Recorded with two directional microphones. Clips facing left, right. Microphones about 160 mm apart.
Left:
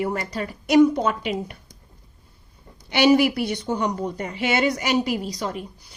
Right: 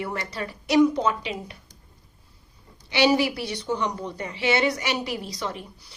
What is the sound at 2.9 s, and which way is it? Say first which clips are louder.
A woman's voice: left 4 dB; 50° left (ahead or behind).